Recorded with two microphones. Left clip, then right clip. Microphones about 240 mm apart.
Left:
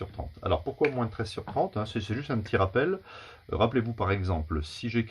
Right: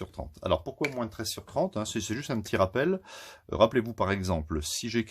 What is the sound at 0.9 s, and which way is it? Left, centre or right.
Speech, right.